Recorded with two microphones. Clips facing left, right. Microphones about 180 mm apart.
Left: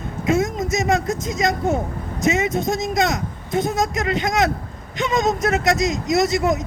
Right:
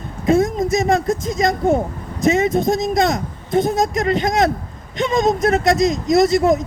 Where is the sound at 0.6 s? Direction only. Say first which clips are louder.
Right 4 dB; 55° right (ahead or behind).